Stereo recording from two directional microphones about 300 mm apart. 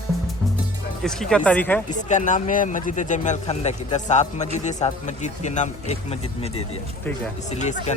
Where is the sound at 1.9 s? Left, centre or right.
Left.